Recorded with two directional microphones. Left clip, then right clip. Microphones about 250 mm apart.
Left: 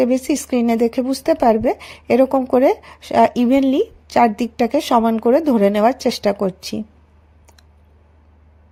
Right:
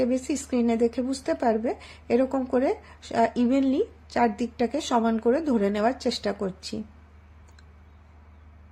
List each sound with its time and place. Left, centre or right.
0.0 s speech: left